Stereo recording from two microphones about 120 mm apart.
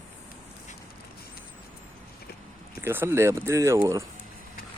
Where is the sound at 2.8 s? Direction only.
20° right (ahead or behind).